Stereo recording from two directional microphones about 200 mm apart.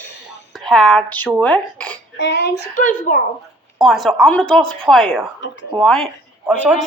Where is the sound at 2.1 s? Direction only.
60° left (ahead or behind).